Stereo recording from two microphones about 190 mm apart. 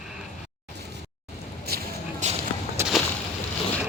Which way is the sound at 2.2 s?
40° right (ahead or behind).